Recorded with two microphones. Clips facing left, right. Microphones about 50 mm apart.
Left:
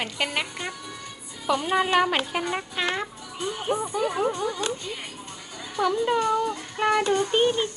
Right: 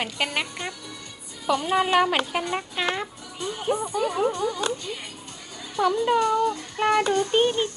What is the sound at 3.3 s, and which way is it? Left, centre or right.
Music, left.